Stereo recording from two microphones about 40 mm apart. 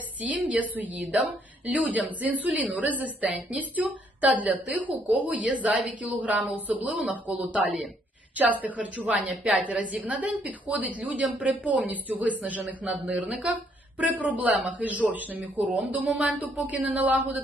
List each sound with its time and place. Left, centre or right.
0.4 s a woman's voice: right
14.5 s speech: right
14.8 s a woman's voice: right